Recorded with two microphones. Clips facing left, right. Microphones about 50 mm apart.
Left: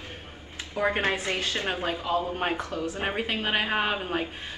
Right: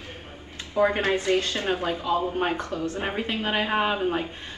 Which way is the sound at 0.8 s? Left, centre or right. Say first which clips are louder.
Right 4 dB; left.